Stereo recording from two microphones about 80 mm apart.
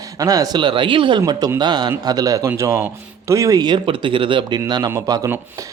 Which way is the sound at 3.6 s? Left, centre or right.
Right.